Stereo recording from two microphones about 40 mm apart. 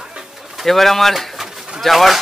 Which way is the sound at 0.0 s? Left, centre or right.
Centre.